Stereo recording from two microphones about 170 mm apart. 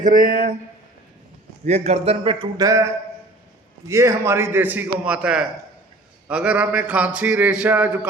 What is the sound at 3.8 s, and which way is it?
Speech, 15° right (ahead or behind).